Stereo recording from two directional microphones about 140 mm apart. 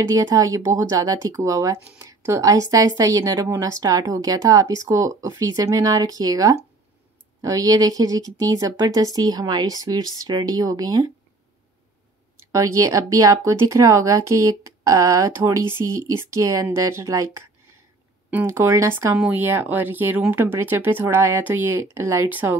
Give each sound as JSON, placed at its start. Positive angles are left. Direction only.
{"t": 0.1, "sound": "speech", "side_deg": -25}
{"t": 12.5, "sound": "speech", "side_deg": -20}
{"t": 19.1, "sound": "speech", "side_deg": -10}